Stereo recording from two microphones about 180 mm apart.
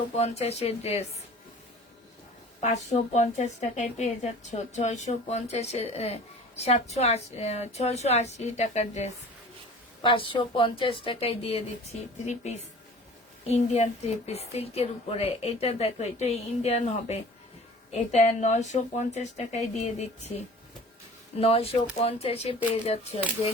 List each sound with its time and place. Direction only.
0.2 s a woman's voice: 35° left (ahead or behind)
2.6 s a woman's voice: 40° left (ahead or behind)
10.0 s a woman's voice: 30° left (ahead or behind)
21.3 s a woman's voice: 35° left (ahead or behind)